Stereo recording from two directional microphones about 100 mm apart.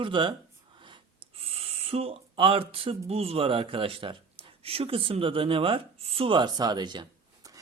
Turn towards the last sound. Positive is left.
turn(degrees=-45)  # may be behind; listen again after turning